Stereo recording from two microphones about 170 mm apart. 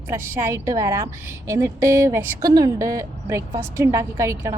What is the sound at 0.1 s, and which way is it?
A woman's voice, 15° right (ahead or behind).